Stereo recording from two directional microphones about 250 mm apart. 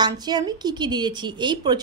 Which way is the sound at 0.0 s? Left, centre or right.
Centre.